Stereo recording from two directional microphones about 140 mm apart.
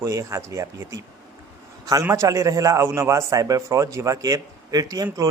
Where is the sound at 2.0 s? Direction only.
20° right (ahead or behind).